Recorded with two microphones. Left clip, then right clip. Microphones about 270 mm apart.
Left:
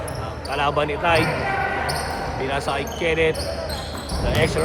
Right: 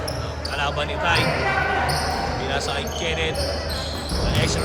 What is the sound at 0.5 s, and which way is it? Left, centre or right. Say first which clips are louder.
Basketball bounce: left 3 dB; left.